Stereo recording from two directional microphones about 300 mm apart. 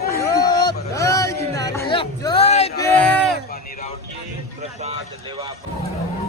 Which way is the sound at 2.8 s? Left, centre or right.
Centre.